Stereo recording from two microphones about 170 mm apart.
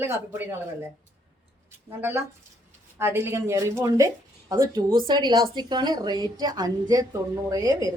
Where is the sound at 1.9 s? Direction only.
15° right (ahead or behind).